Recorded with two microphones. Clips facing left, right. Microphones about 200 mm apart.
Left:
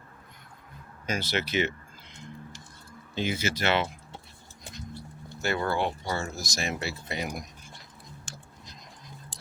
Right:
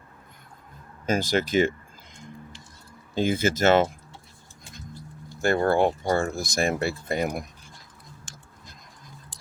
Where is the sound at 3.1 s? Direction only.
50° right (ahead or behind).